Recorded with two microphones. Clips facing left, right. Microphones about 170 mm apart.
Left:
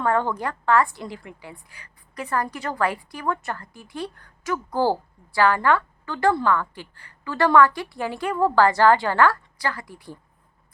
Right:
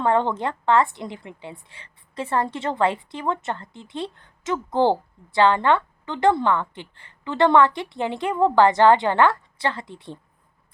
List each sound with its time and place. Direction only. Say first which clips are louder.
0.0 s a woman's voice: right 2 dB; 20° right (ahead or behind)